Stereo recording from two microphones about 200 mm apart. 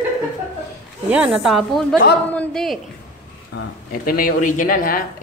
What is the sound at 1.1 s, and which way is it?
A woman's voice, 5° right (ahead or behind).